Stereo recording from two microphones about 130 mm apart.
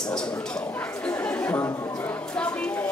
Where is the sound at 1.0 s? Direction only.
15° left (ahead or behind).